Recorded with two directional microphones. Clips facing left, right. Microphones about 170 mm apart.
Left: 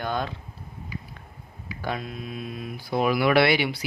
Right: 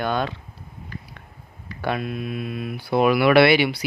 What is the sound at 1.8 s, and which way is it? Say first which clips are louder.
Speech: right 6 dB; 65° right (ahead or behind).